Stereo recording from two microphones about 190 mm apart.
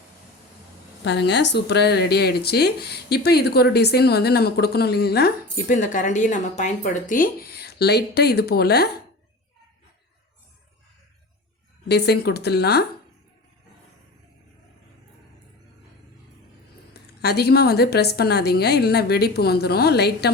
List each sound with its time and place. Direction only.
1.0 s speech: 65° left (ahead or behind)
11.9 s speech: 60° left (ahead or behind)
16.9 s speech: 60° left (ahead or behind)